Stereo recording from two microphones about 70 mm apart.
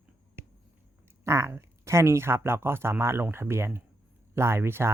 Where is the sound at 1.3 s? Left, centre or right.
Right.